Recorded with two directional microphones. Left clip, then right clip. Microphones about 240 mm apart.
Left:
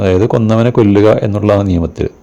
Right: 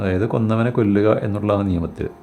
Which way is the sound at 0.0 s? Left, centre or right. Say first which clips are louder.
Left 10 dB; left.